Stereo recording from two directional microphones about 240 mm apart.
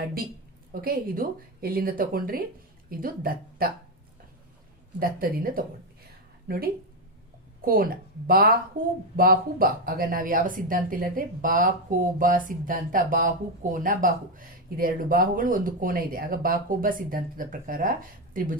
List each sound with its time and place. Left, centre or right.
0.7 s speech: right
4.9 s speech: right